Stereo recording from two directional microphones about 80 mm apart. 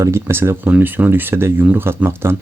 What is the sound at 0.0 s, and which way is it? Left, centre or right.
Speech, right.